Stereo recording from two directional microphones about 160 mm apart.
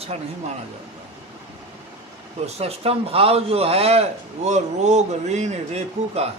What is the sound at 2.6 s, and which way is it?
A man's voice, 40° right (ahead or behind).